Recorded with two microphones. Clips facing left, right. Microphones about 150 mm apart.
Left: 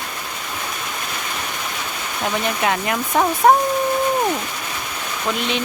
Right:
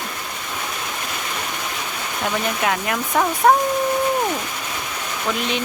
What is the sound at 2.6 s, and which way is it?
Speech, centre (ahead or behind).